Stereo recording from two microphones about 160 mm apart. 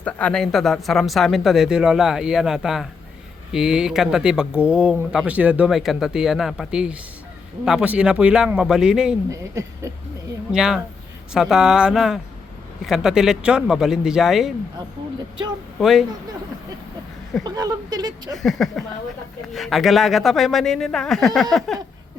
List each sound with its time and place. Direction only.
0.0 s speech: 10° left (ahead or behind)
9.3 s speech: 20° right (ahead or behind)
10.5 s speech: 5° right (ahead or behind)
15.8 s speech: centre (ahead or behind)
17.4 s speech: 25° right (ahead or behind)
18.4 s speech: centre (ahead or behind)